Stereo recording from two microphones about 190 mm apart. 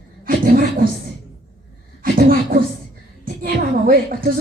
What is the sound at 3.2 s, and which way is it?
A woman's voice, 50° right (ahead or behind).